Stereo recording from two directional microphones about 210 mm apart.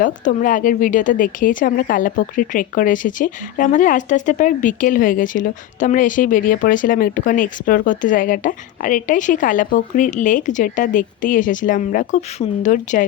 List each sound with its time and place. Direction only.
0.0 s a woman's voice: 40° left (ahead or behind)